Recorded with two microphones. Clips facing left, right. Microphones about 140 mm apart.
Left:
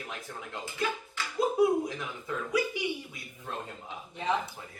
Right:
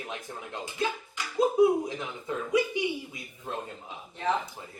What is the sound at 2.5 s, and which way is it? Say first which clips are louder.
Speech: right 4 dB; 20° right (ahead or behind).